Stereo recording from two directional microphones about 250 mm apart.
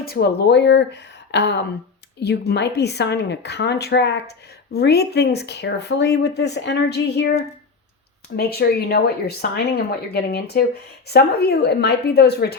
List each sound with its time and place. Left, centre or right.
0.0 s speech: left
8.4 s speech: left